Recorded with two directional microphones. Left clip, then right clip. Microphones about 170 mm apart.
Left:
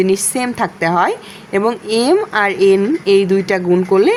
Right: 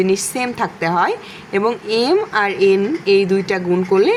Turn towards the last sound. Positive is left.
turn(degrees=20)  # may be behind; listen again after turning